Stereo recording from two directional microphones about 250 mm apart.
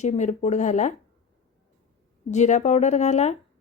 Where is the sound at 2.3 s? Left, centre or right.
Left.